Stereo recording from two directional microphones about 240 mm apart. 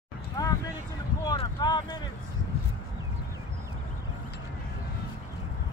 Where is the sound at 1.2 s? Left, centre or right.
Centre.